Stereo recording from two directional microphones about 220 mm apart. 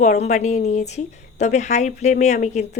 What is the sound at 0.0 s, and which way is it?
Speech, 35° left (ahead or behind).